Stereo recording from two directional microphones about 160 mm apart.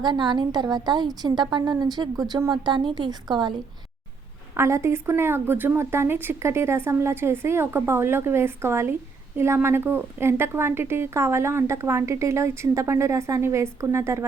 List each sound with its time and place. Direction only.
0.0 s a woman's voice: 25° right (ahead or behind)
4.5 s a woman's voice: 15° right (ahead or behind)